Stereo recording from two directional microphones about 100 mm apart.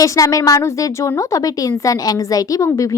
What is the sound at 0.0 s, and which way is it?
A woman's voice, 35° left (ahead or behind).